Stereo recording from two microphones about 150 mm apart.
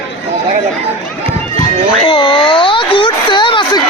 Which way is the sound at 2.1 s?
30° left (ahead or behind).